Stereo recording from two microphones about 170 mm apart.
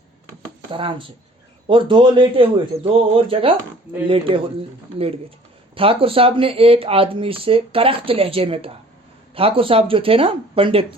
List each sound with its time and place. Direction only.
0.7 s a man's voice: 30° right (ahead or behind)